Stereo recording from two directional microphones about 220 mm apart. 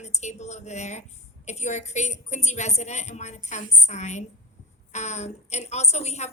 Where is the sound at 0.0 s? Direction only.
30° left (ahead or behind).